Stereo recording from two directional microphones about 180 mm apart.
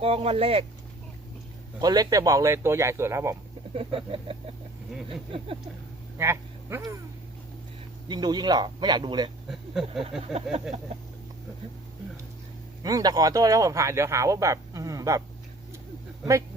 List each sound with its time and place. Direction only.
0.0 s speech: 30° right (ahead or behind)
1.8 s speech: 20° right (ahead or behind)
3.8 s speech: 30° right (ahead or behind)
6.1 s speech: 15° right (ahead or behind)
8.0 s a man's voice: 25° right (ahead or behind)
9.5 s speech: centre (ahead or behind)
10.3 s speech: 35° right (ahead or behind)
12.8 s speech: 20° right (ahead or behind)